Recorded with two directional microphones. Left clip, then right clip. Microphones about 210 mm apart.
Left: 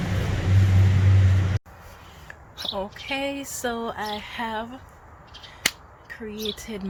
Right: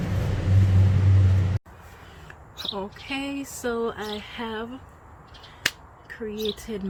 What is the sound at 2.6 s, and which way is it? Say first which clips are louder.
Speech: left 2 dB; centre (ahead or behind).